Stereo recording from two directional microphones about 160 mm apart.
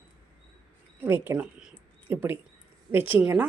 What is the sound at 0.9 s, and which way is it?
A woman's voice, 15° right (ahead or behind).